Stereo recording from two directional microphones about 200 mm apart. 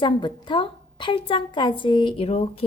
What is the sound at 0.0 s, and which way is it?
A woman's voice, 25° left (ahead or behind).